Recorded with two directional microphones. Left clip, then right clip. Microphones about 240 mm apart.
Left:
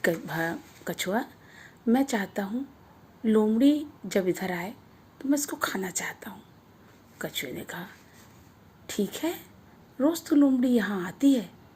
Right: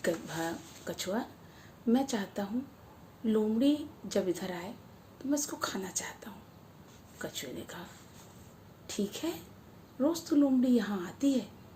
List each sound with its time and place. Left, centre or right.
0.0 s speech: left
8.9 s speech: left